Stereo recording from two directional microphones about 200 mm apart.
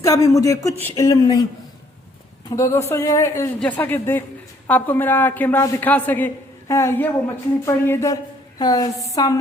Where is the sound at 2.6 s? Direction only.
15° left (ahead or behind).